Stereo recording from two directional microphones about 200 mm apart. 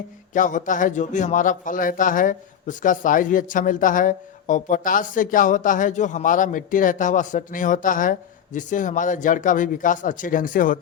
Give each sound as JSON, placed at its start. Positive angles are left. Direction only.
{"t": 0.3, "sound": "a man's voice", "side_deg": 40}